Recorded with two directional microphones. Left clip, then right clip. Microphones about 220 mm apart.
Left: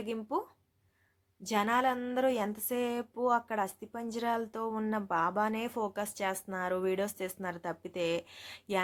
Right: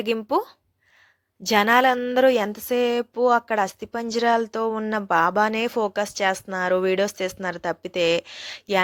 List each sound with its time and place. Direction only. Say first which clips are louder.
0.0 s a woman's voice: right 12 dB; 40° right (ahead or behind)
1.5 s a woman's voice: right 12 dB; 40° right (ahead or behind)